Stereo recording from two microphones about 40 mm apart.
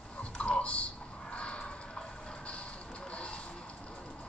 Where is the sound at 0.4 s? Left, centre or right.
Left.